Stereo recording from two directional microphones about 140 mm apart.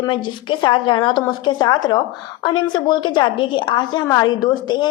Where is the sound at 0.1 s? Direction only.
35° left (ahead or behind).